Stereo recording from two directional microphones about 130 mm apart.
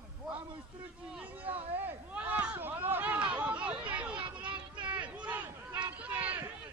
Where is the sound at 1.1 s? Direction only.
10° right (ahead or behind).